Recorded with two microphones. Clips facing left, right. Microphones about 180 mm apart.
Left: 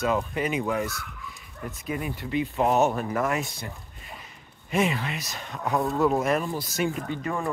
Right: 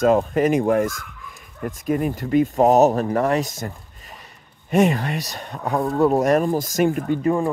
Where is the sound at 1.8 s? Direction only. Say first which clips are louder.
Right 10 dB; 45° right (ahead or behind).